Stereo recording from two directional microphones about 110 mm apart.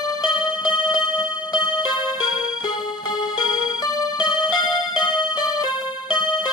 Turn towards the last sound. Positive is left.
turn(degrees=40)  # may be behind; listen again after turning